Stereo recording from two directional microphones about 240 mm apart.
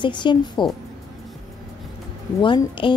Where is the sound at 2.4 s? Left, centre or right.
Left.